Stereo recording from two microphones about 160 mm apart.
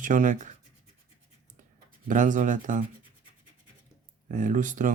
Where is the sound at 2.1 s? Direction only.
55° right (ahead or behind).